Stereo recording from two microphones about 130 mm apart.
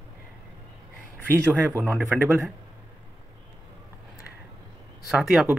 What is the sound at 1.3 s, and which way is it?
Speech, 20° right (ahead or behind).